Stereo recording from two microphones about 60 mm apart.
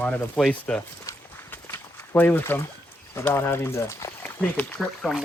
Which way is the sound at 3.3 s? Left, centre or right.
Left.